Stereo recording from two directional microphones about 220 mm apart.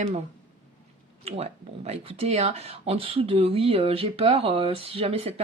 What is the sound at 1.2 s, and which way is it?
Speech, 25° right (ahead or behind).